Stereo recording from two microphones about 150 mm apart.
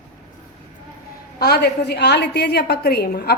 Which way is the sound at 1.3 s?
90° left.